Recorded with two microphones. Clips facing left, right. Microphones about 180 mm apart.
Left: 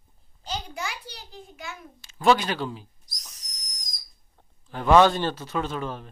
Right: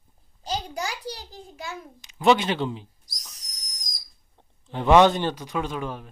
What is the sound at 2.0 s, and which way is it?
Speech, 20° right (ahead or behind).